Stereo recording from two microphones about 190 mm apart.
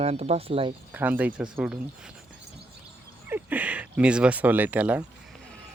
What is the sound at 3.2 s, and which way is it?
Speech, 10° right (ahead or behind).